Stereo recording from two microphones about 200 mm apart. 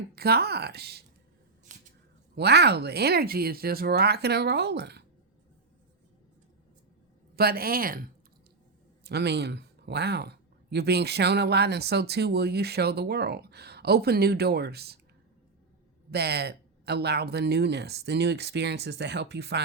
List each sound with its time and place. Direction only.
0.2 s speech: 50° right (ahead or behind)
2.3 s speech: 55° right (ahead or behind)
7.3 s speech: 50° right (ahead or behind)
16.1 s speech: 55° right (ahead or behind)